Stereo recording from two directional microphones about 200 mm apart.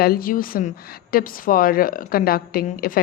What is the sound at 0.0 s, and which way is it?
A woman's voice, 50° left (ahead or behind).